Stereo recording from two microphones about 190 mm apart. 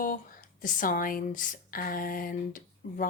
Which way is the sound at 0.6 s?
45° left (ahead or behind).